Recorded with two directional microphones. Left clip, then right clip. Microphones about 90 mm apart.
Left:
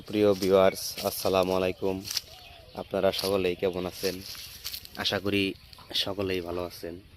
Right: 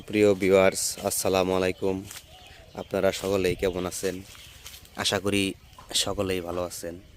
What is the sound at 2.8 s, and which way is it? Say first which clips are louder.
Speech: right 1 dB; 50° right (ahead or behind).